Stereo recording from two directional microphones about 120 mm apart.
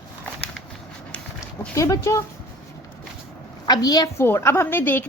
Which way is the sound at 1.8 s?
25° left (ahead or behind).